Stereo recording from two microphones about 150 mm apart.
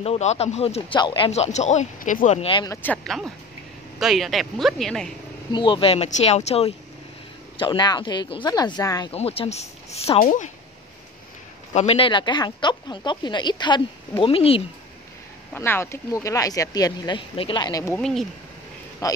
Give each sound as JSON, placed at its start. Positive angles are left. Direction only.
{"t": 0.0, "sound": "speech", "side_deg": 45}
{"t": 0.9, "sound": "speech", "side_deg": 30}
{"t": 2.3, "sound": "speech", "side_deg": 35}
{"t": 2.7, "sound": "speech", "side_deg": 10}
{"t": 5.5, "sound": "speech", "side_deg": 35}
{"t": 7.5, "sound": "speech", "side_deg": 30}
{"t": 9.1, "sound": "speech", "side_deg": 40}
{"t": 10.2, "sound": "speech", "side_deg": 55}
{"t": 11.7, "sound": "speech", "side_deg": 45}
{"t": 15.5, "sound": "speech", "side_deg": 15}
{"t": 17.9, "sound": "speech", "side_deg": 5}
{"t": 19.0, "sound": "speech", "side_deg": 20}